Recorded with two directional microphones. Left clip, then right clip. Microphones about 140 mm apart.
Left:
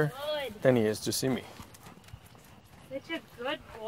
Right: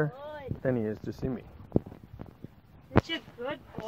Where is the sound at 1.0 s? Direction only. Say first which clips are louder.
Left 7 dB; 10° left (ahead or behind).